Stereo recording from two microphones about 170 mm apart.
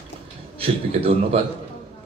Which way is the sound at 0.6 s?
35° right (ahead or behind).